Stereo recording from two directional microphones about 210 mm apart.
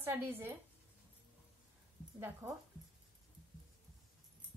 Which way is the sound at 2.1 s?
15° right (ahead or behind).